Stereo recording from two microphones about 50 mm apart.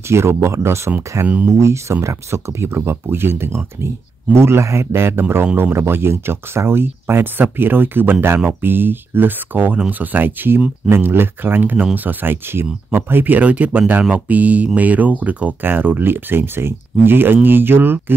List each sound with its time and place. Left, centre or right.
0.1 s speech: right
1.2 s speech: right
1.5 s speech: right
15.6 s speech: right